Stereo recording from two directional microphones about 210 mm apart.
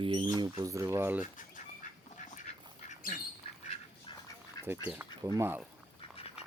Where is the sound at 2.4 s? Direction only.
35° left (ahead or behind).